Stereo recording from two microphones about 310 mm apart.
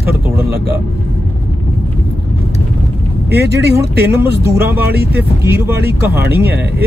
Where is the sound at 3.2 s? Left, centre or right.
Right.